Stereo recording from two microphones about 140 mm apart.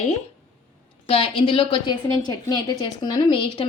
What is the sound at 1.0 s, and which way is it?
A woman's voice, 45° left (ahead or behind).